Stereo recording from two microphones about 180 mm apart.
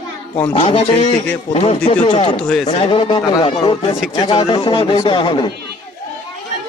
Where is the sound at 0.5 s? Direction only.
35° left (ahead or behind).